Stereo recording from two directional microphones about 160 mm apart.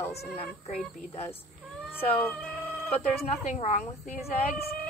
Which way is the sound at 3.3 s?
40° left (ahead or behind).